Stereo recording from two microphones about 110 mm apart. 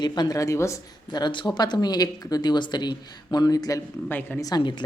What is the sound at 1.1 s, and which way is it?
Speech, 40° left (ahead or behind).